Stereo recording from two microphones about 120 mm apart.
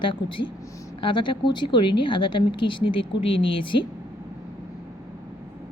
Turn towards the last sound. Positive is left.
turn(degrees=45)  # may be behind; listen again after turning